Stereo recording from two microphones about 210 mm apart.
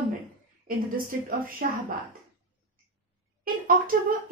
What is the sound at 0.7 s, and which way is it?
Speech, 45° right (ahead or behind).